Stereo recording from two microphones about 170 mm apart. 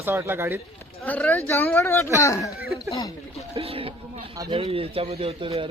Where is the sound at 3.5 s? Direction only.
35° right (ahead or behind).